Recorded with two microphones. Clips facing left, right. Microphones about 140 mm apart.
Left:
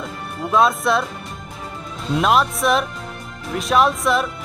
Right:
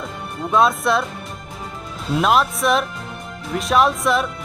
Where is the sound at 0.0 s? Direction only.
Centre (ahead or behind).